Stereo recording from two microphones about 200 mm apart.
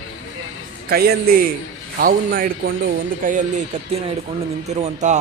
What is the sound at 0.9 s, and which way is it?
Speech, 50° right (ahead or behind).